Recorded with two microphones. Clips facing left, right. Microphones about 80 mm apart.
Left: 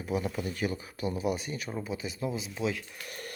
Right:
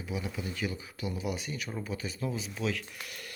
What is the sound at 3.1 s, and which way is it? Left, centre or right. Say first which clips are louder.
Music: left 4 dB; left.